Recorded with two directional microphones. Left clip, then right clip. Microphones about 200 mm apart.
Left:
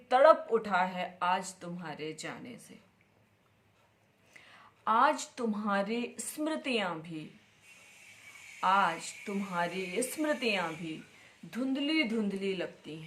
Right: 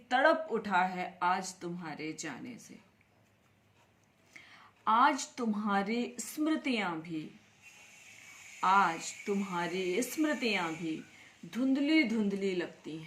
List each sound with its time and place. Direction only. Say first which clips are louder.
0.1 s speech: left 5 dB; 15° left (ahead or behind)
4.4 s a sound: right 1 dB; 15° left (ahead or behind)
5.3 s speech: even; 15° left (ahead or behind)
8.6 s speech: even; 15° left (ahead or behind)